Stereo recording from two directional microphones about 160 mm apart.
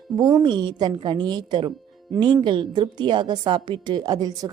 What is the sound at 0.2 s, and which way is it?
Speech, 25° right (ahead or behind).